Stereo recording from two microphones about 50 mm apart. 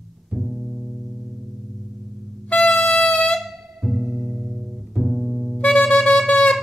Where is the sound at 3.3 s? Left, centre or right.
Centre.